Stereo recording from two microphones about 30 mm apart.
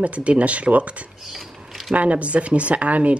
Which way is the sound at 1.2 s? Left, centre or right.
Centre.